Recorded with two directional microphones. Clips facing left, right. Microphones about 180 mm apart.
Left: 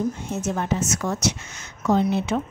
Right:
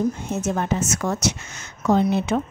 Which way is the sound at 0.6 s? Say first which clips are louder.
Right 1 dB; 50° right (ahead or behind).